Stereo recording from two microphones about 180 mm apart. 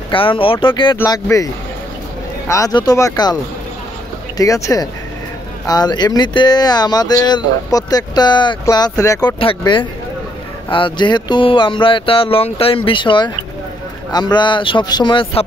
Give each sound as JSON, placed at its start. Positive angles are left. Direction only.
{"t": 0.1, "sound": "speech", "side_deg": 30}
{"t": 4.4, "sound": "speech", "side_deg": 20}